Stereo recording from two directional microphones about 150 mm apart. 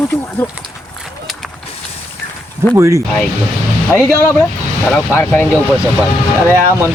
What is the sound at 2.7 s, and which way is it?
Speech, 20° right (ahead or behind).